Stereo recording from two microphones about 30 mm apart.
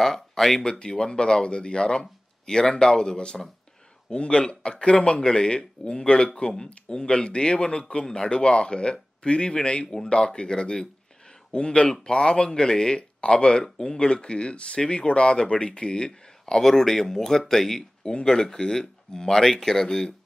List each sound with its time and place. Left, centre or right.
0.0 s a sound: centre
0.9 s speech: left
16.5 s speech: centre
18.1 s speech: left